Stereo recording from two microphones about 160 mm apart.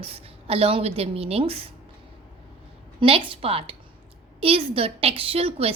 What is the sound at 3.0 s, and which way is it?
A woman's voice, 35° right (ahead or behind).